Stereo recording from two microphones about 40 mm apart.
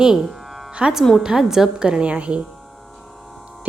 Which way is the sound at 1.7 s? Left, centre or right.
Right.